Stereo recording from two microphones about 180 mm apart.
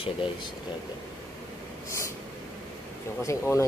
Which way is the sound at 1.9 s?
15° left (ahead or behind).